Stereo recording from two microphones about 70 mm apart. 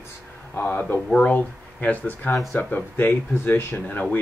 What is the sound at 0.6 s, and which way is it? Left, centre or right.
Speech, left.